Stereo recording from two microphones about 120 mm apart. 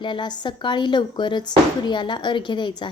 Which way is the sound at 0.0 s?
40° left (ahead or behind).